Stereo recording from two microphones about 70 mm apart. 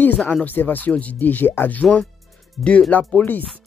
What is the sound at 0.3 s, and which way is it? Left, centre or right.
Speech, left.